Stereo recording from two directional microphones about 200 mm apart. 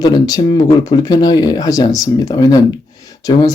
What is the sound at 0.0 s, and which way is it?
Speech, 20° left (ahead or behind).